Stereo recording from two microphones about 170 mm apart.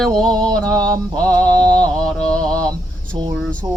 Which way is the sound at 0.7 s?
20° right (ahead or behind).